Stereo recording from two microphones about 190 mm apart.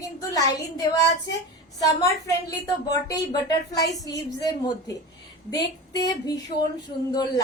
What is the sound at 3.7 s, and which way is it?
A woman's voice, 20° left (ahead or behind).